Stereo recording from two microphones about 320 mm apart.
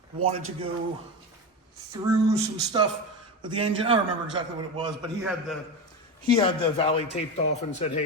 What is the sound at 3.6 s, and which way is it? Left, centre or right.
A man's voice, centre.